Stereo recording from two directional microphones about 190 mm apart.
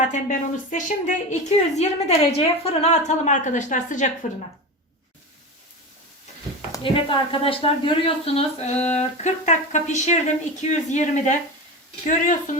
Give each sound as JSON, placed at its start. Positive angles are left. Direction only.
{"t": 0.0, "sound": "a woman's voice", "side_deg": 40}
{"t": 6.8, "sound": "a woman's voice", "side_deg": 30}